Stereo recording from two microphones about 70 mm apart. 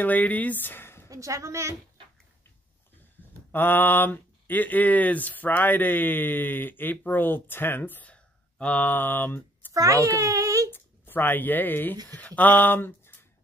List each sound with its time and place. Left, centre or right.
0.0 s speech: left
1.0 s a woman's voice: right
3.2 s a sound: left
3.5 s speech: left
9.8 s a child's voice: right
10.7 s speech: left